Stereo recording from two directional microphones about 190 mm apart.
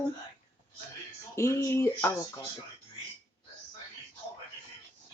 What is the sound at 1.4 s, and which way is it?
Speech, 15° left (ahead or behind).